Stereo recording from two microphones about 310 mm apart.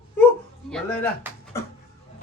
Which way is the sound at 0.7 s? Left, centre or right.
Centre.